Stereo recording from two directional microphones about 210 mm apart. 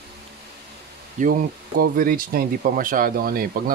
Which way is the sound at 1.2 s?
40° right (ahead or behind).